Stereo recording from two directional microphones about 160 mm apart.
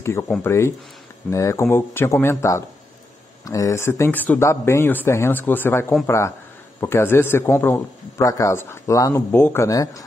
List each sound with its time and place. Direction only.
0.0 s a man's voice: 15° left (ahead or behind)